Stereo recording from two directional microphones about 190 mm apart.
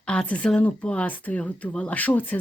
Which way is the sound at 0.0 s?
5° left (ahead or behind).